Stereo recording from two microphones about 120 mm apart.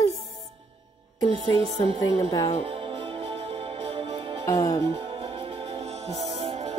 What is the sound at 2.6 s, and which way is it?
Music, 50° right (ahead or behind).